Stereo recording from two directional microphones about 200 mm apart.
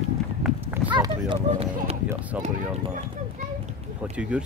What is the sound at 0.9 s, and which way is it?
Speech, 25° right (ahead or behind).